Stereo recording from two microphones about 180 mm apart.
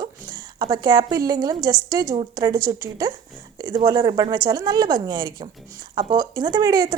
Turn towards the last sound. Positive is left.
turn(degrees=-20)  # may be behind; listen again after turning